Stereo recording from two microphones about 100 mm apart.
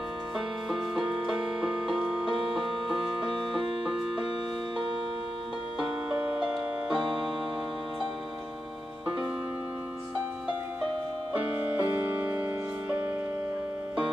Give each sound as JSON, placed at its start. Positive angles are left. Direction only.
{"t": 0.7, "sound": "music", "side_deg": 0}
{"t": 5.8, "sound": "music", "side_deg": -5}
{"t": 11.3, "sound": "music", "side_deg": -15}